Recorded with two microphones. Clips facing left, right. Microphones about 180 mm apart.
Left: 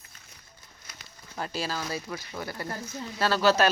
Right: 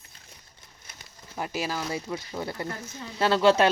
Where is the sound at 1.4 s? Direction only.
15° right (ahead or behind).